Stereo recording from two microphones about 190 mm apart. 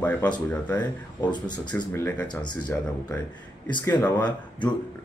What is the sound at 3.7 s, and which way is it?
Speech, 20° left (ahead or behind).